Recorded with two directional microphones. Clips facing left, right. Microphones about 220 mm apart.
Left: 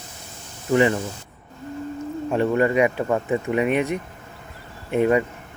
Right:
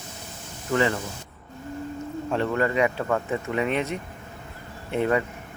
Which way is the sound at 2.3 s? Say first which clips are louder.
Left 5 dB; 15° left (ahead or behind).